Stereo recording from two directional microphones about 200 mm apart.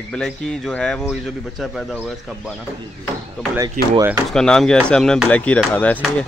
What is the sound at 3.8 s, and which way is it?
Speech, 45° right (ahead or behind).